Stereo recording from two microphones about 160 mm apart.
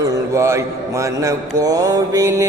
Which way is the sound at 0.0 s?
20° right (ahead or behind).